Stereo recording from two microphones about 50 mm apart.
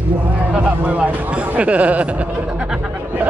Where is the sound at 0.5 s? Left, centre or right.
Right.